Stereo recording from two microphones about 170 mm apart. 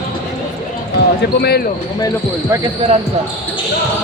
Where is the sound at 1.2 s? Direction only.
70° left (ahead or behind).